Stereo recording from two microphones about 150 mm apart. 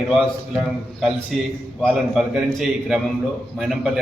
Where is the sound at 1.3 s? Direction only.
5° right (ahead or behind).